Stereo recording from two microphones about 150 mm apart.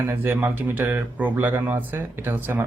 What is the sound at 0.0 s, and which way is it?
Speech, 15° right (ahead or behind).